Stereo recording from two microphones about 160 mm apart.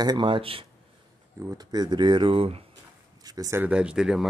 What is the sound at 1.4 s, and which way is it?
Speech, 20° right (ahead or behind).